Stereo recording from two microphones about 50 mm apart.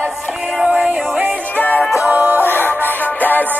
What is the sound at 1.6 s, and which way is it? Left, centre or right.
Music, left.